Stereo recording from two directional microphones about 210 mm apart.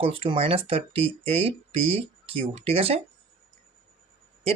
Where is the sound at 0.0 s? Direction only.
25° right (ahead or behind).